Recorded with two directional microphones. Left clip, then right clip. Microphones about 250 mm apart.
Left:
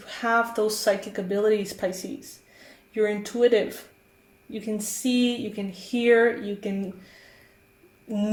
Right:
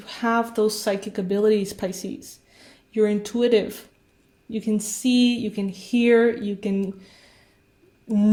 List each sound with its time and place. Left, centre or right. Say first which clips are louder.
0.0 s speech: even; right
8.0 s speech: right 6 dB; right